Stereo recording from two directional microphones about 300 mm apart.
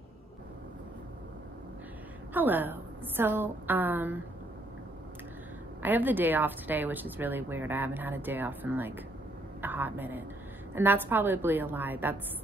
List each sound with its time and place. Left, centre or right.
2.3 s a woman's voice: centre
5.8 s a woman's voice: centre